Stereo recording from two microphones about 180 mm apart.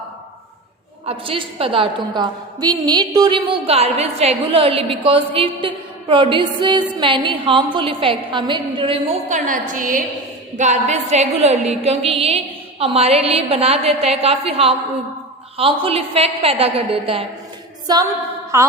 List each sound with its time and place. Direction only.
1.0 s a woman's voice: 30° right (ahead or behind)
9.3 s a woman's voice: 45° right (ahead or behind); by 17.2 s 30° right (ahead or behind)
17.8 s a sound: 20° right (ahead or behind)
18.5 s music: 15° right (ahead or behind)